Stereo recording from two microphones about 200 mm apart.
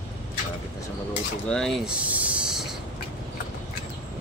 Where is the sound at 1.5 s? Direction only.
Centre (ahead or behind).